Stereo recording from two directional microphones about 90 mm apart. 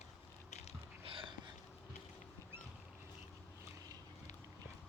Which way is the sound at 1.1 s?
70° right (ahead or behind).